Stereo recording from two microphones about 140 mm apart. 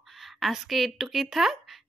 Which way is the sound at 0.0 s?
Centre (ahead or behind).